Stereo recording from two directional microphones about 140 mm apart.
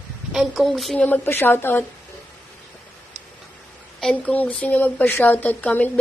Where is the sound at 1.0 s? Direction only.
15° left (ahead or behind).